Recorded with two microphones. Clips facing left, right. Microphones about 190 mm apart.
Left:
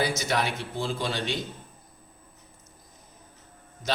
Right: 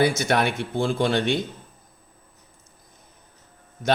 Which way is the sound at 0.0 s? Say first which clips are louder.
Right 6 dB; 55° right (ahead or behind).